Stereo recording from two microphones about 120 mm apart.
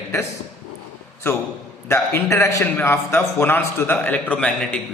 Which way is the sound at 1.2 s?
20° left (ahead or behind).